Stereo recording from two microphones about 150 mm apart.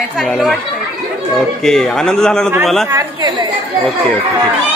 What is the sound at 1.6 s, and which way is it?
Speech, 5° left (ahead or behind).